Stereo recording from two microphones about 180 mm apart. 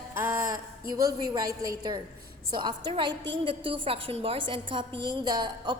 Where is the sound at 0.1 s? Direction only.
15° right (ahead or behind).